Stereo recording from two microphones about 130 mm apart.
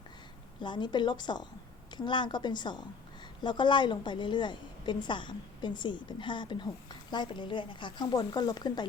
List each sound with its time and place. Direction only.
0.6 s a woman's voice: 35° left (ahead or behind)